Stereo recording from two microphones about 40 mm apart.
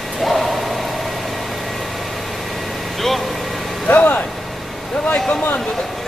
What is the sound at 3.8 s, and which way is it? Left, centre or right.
Vehicle, left.